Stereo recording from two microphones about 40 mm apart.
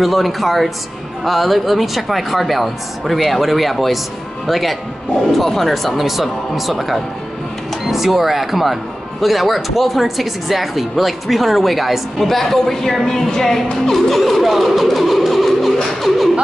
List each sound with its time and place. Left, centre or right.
0.0 s speech: centre
13.8 s music: centre